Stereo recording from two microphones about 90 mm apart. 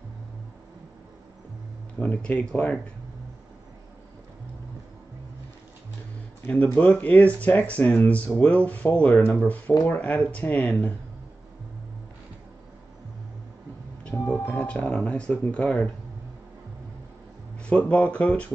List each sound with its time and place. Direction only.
2.0 s speech: 15° left (ahead or behind)
6.4 s speech: 20° left (ahead or behind)
14.1 s music: 30° left (ahead or behind)
14.6 s speech: 15° left (ahead or behind)
17.6 s speech: 15° left (ahead or behind)